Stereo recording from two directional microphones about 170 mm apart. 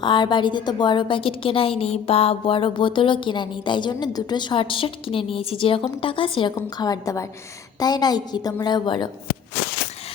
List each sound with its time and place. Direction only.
0.0 s a woman's voice: 25° left (ahead or behind)